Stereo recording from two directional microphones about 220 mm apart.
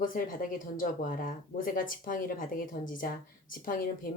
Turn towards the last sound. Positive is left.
turn(degrees=40)  # may be behind; listen again after turning